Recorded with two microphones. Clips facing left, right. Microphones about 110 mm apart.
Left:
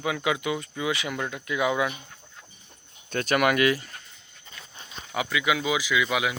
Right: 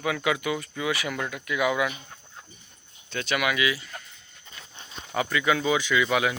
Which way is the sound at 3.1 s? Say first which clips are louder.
Left 4 dB; 45° left (ahead or behind).